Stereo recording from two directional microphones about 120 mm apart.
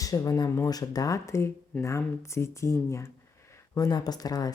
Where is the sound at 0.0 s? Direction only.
30° left (ahead or behind).